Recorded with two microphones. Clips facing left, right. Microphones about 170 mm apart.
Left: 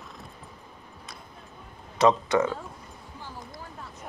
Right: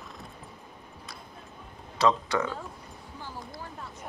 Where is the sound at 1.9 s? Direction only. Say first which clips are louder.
Left 4 dB; 20° left (ahead or behind).